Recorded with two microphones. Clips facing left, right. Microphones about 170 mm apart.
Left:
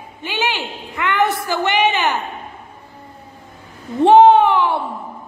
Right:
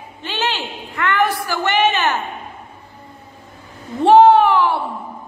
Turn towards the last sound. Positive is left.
turn(degrees=20)  # may be behind; listen again after turning